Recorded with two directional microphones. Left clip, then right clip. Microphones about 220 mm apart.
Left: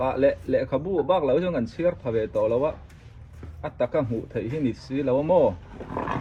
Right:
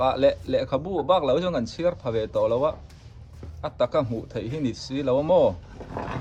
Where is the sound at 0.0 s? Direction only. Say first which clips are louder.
Right 1 dB; 5° right (ahead or behind).